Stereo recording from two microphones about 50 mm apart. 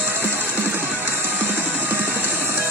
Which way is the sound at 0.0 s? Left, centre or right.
Right.